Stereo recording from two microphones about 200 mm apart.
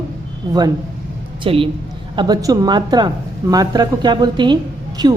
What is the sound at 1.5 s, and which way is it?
A woman's voice, 25° right (ahead or behind).